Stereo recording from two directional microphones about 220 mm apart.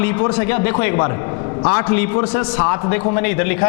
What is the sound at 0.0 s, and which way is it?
A man's voice, 15° left (ahead or behind).